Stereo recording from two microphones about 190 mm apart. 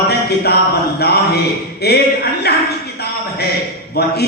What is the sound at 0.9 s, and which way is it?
Speech, 55° left (ahead or behind).